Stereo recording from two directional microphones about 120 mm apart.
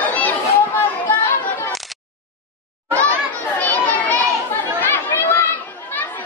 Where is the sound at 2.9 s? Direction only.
15° left (ahead or behind).